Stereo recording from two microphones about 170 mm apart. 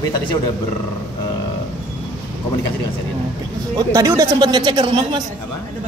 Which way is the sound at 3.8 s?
20° right (ahead or behind).